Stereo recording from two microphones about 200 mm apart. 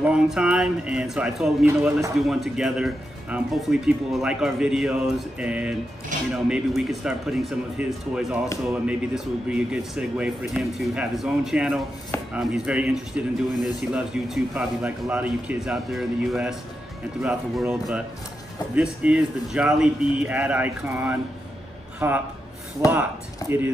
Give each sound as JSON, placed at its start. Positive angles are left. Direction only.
{"t": 0.0, "sound": "speech", "side_deg": -5}
{"t": 2.1, "sound": "speech", "side_deg": 0}
{"t": 23.4, "sound": "speech", "side_deg": 15}